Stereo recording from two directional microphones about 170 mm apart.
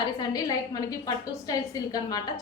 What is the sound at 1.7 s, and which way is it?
Speech, 20° left (ahead or behind).